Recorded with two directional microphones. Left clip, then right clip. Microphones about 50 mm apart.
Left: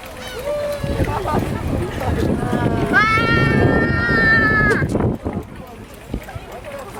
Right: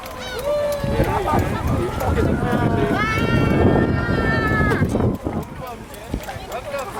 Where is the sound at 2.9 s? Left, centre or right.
Left.